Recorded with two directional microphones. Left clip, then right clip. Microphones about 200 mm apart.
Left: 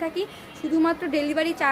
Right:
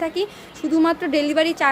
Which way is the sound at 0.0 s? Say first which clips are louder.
Right 4 dB; 25° right (ahead or behind).